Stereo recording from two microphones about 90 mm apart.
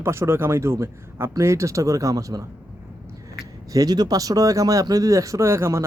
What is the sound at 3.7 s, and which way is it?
Speech, 45° right (ahead or behind).